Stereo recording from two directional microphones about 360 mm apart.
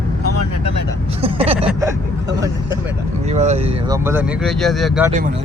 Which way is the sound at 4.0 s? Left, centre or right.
Centre.